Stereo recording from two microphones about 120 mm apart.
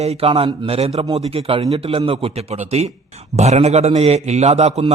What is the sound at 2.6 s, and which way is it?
Speech, 60° right (ahead or behind).